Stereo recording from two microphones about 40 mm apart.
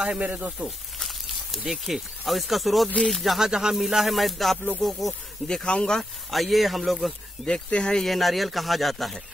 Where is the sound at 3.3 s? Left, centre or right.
Centre.